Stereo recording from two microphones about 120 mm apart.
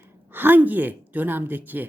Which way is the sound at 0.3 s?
15° right (ahead or behind).